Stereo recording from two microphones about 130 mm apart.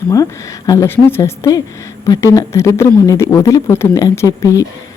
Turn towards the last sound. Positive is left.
turn(degrees=25)  # may be behind; listen again after turning